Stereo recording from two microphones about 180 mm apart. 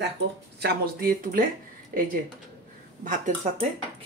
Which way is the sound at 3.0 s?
45° right (ahead or behind).